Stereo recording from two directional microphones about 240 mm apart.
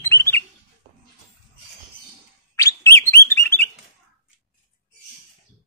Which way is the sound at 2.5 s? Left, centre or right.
Centre.